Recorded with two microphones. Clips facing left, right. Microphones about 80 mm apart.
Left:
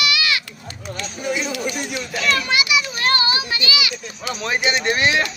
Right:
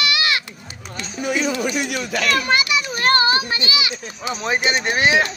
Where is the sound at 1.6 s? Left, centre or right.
Right.